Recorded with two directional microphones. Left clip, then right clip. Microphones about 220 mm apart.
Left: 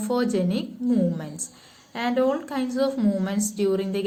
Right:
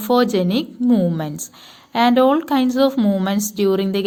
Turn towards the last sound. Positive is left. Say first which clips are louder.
# right 6 dB
turn(degrees=-40)  # may be behind; listen again after turning